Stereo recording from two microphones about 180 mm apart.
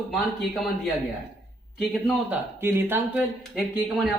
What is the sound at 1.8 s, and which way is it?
A man's voice, 5° right (ahead or behind).